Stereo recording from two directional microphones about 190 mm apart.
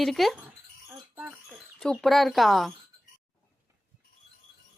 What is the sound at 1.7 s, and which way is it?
Speech, 5° left (ahead or behind).